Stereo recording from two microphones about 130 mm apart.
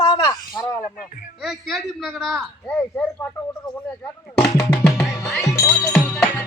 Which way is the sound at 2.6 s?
10° left (ahead or behind).